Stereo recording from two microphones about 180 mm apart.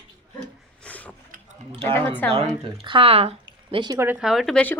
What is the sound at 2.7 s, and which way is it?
Speech, 30° right (ahead or behind).